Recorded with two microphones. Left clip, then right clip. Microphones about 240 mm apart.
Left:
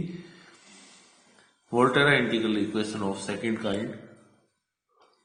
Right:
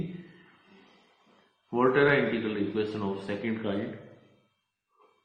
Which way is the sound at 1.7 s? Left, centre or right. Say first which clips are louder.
Left 2 dB; left.